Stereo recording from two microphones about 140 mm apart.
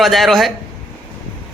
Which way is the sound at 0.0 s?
Centre (ahead or behind).